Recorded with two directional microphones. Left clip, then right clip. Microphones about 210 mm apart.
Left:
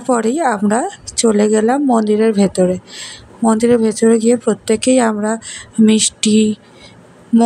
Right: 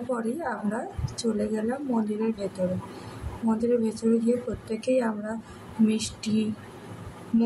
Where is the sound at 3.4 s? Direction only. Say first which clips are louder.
Left 13 dB; 45° left (ahead or behind).